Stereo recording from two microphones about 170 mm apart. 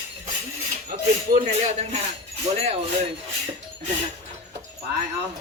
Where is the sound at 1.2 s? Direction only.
50° right (ahead or behind).